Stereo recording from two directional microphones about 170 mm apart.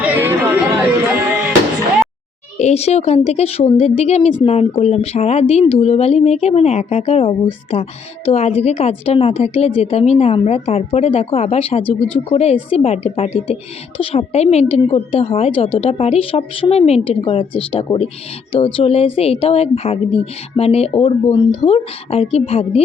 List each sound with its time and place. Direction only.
0.0 s chatter: 10° right (ahead or behind)
2.6 s speech: 40° left (ahead or behind)